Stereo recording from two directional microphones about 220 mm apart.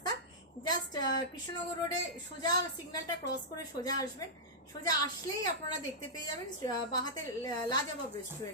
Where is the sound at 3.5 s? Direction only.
15° left (ahead or behind).